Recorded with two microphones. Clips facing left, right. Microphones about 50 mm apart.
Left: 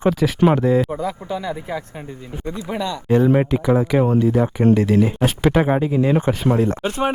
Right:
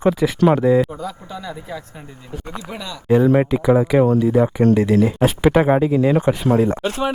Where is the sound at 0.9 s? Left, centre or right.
Left.